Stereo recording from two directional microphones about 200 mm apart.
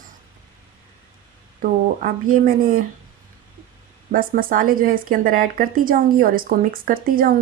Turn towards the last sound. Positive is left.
turn(degrees=-45)  # may be behind; listen again after turning